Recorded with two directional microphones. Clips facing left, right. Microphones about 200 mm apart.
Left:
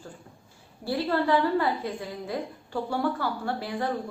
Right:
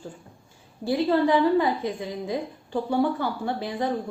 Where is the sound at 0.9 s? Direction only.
15° right (ahead or behind).